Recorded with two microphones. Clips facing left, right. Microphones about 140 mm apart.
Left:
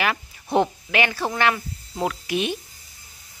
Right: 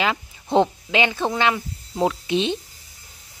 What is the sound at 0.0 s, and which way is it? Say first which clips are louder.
Speech: right 1 dB; 20° right (ahead or behind).